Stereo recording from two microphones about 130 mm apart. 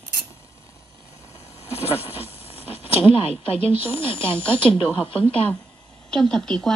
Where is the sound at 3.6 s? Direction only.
45° left (ahead or behind).